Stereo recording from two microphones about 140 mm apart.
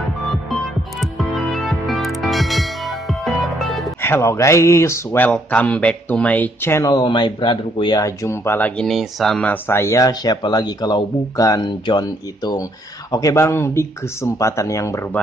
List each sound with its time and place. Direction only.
1.1 s music: centre (ahead or behind)
4.0 s speech: 20° left (ahead or behind)
6.9 s speech: 30° left (ahead or behind); by 8.8 s 10° left (ahead or behind)
8.8 s speech: centre (ahead or behind); by 15.0 s 20° left (ahead or behind)